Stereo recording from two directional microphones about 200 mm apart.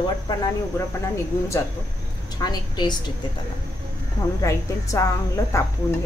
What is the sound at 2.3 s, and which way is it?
Speech, 20° left (ahead or behind).